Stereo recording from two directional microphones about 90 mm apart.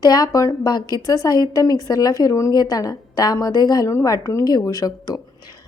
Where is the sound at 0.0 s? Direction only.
45° left (ahead or behind).